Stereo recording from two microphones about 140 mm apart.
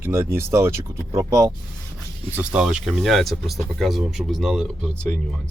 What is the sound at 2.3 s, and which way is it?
Speech, 5° right (ahead or behind).